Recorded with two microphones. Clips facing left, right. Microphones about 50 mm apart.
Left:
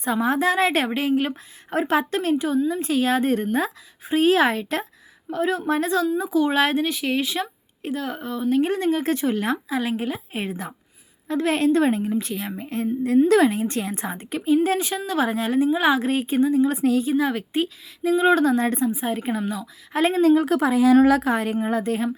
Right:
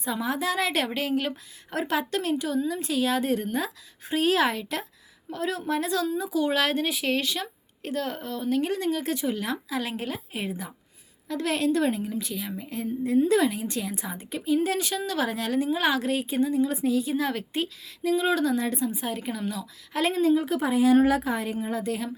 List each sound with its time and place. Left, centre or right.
0.0 s a woman's voice: left
6.8 s a woman's voice: centre; by 8.7 s left
8.7 s a woman's voice: left
9.5 s a woman's voice: left
10.3 s a woman's voice: left
14.5 s a woman's voice: left
16.0 s a woman's voice: left
16.7 s a woman's voice: left
17.1 s a woman's voice: centre; by 18.9 s left
18.9 s a woman's voice: left
20.2 s a woman's voice: left
21.2 s speech: left